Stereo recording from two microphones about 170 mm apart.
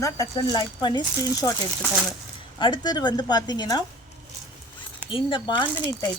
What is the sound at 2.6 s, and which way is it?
Speech, 25° left (ahead or behind).